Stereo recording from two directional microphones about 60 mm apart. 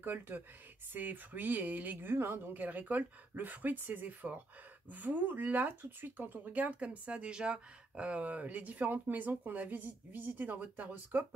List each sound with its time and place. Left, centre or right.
0.0 s speech: right
2.1 s speech: right